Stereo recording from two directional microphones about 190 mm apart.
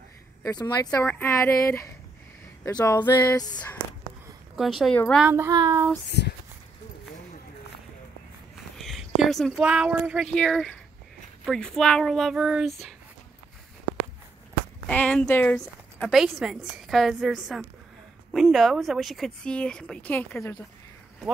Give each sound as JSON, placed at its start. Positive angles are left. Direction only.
{"t": 0.4, "sound": "speech", "side_deg": 20}
{"t": 0.8, "sound": "speech", "side_deg": 10}
{"t": 4.6, "sound": "a woman's voice", "side_deg": 0}
{"t": 5.3, "sound": "child singing", "side_deg": -15}
{"t": 8.7, "sound": "a woman's voice", "side_deg": 0}
{"t": 14.9, "sound": "a woman's voice", "side_deg": 5}